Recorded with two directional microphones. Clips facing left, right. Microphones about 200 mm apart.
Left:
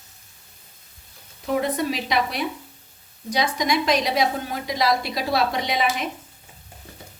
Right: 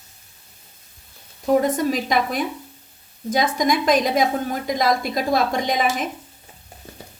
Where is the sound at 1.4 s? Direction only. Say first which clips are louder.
Right 5 dB; 40° right (ahead or behind).